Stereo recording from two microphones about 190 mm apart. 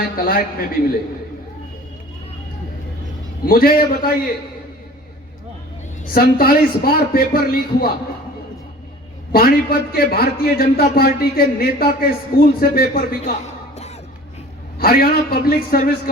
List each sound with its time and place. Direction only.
0.2 s a man's voice: 50° left (ahead or behind)
3.4 s a man's voice: 50° left (ahead or behind)
6.1 s a man's voice: 50° left (ahead or behind)
9.3 s a man's voice: 50° left (ahead or behind); by 13.9 s 35° left (ahead or behind)
14.8 s a man's voice: 50° left (ahead or behind)